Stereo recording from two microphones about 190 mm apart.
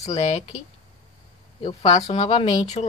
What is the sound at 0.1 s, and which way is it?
Speech, 35° left (ahead or behind).